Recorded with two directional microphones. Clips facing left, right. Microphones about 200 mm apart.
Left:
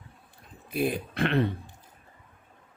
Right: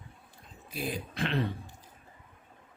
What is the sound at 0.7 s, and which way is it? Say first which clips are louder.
Speech: left 8 dB; 60° left (ahead or behind).